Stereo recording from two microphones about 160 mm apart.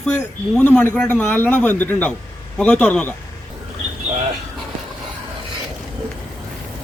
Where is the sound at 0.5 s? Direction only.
10° left (ahead or behind).